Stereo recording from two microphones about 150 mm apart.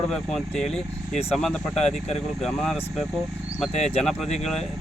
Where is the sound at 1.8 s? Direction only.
45° left (ahead or behind).